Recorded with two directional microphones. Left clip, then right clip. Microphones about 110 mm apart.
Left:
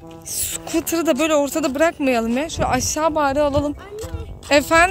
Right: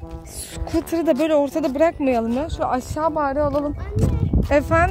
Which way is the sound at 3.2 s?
55° left (ahead or behind).